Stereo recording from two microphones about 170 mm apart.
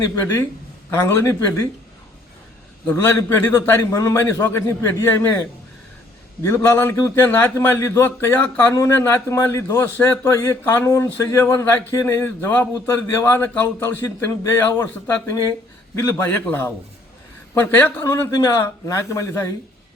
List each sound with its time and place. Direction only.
0.0 s speech: 15° left (ahead or behind)
2.8 s speech: 15° left (ahead or behind)